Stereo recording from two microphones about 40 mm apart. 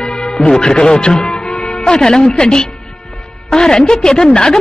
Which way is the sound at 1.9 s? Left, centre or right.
Centre.